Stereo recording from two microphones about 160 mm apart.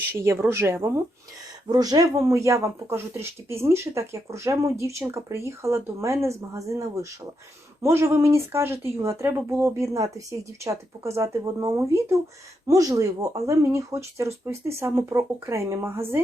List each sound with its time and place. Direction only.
0.2 s speech: 15° right (ahead or behind)